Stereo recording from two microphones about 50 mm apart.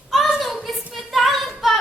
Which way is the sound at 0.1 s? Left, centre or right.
Centre.